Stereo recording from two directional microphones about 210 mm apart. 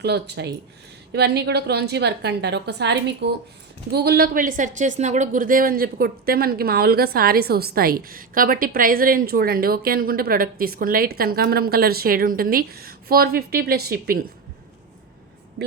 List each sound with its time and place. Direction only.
0.0 s speech: 55° right (ahead or behind)
15.6 s vehicle: 50° right (ahead or behind)